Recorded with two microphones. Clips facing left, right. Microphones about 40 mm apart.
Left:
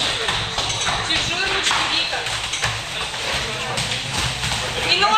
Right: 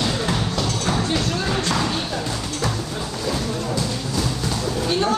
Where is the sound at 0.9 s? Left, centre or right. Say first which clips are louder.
Even; left.